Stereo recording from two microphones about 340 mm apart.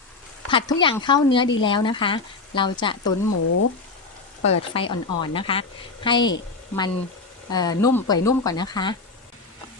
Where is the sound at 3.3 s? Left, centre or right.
Left.